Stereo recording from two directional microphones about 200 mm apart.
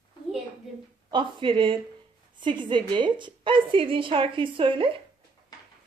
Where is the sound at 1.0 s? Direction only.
25° right (ahead or behind).